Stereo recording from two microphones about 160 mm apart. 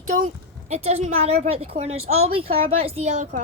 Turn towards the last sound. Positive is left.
turn(degrees=-45)  # may be behind; listen again after turning